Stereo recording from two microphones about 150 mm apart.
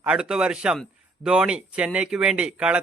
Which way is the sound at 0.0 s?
5° right (ahead or behind).